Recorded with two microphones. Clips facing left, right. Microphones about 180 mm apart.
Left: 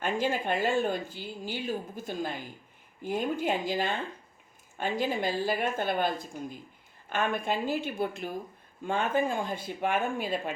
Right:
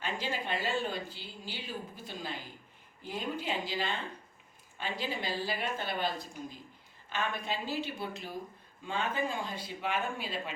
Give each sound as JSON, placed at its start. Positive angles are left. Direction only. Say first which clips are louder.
{"t": 0.0, "sound": "speech", "louder": "left 7 dB", "side_deg": 50}